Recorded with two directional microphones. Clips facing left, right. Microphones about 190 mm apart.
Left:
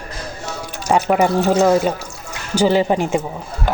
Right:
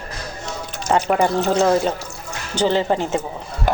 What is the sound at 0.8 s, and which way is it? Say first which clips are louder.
Speech: left 2 dB; 10° left (ahead or behind).